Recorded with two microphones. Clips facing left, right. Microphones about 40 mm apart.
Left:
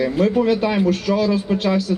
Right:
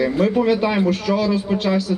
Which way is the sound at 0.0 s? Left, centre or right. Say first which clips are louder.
Even; centre.